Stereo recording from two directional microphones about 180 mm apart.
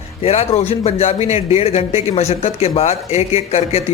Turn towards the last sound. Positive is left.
turn(degrees=35)  # may be behind; listen again after turning